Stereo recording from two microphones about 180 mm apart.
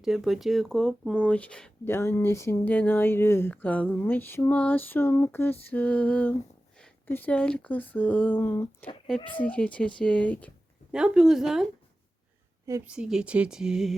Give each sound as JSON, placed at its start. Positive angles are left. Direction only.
{"t": 0.0, "sound": "speech", "side_deg": 0}
{"t": 10.9, "sound": "speech", "side_deg": -5}
{"t": 12.6, "sound": "a woman's voice", "side_deg": -15}
{"t": 12.9, "sound": "speech", "side_deg": -5}